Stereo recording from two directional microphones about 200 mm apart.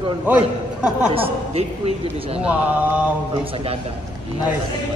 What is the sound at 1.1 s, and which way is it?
A woman's voice, 30° right (ahead or behind).